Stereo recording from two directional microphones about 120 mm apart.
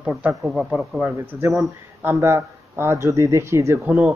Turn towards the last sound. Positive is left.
turn(degrees=-10)  # may be behind; listen again after turning